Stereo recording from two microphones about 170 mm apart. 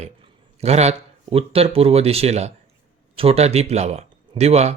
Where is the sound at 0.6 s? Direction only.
40° right (ahead or behind).